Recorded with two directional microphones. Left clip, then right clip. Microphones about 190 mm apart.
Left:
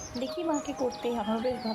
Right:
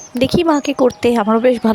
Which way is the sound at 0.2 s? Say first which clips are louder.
Right 17 dB; 60° right (ahead or behind).